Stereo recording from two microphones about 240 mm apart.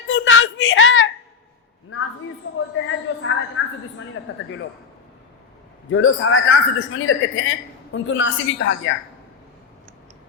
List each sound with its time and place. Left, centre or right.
0.1 s a sound: left
4.2 s a woman's voice: left
5.9 s a man's voice: left